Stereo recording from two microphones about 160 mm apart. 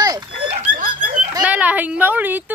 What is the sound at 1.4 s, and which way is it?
Speech, 10° right (ahead or behind).